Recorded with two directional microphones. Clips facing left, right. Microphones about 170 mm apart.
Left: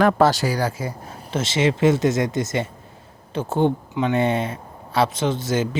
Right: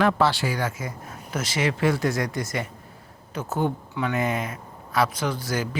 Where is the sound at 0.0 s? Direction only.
45° left (ahead or behind).